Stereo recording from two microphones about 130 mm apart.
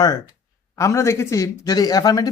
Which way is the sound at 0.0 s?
30° left (ahead or behind).